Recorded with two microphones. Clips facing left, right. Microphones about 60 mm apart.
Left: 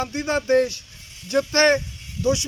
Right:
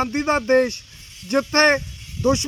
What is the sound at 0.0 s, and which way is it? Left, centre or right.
Speech, right.